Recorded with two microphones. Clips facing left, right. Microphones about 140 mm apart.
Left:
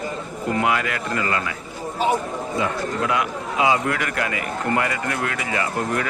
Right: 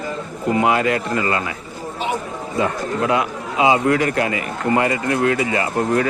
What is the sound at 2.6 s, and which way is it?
A man's voice, 25° right (ahead or behind).